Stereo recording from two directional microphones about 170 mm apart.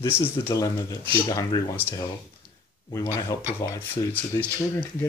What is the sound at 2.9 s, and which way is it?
Speech, 20° left (ahead or behind).